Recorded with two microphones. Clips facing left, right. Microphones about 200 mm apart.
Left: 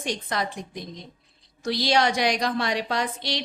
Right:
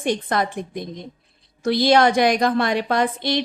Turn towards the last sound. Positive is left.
turn(degrees=-55)  # may be behind; listen again after turning